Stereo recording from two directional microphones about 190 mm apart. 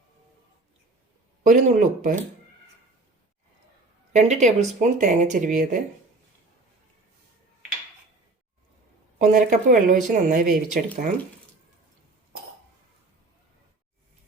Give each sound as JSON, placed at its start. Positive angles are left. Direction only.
{"t": 1.5, "sound": "speech", "side_deg": -40}
{"t": 4.1, "sound": "speech", "side_deg": -40}
{"t": 9.1, "sound": "speech", "side_deg": -45}